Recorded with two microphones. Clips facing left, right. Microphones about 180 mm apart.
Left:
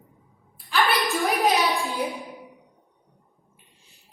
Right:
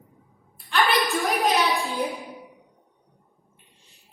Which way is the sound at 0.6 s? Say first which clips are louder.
Right 1 dB; centre (ahead or behind).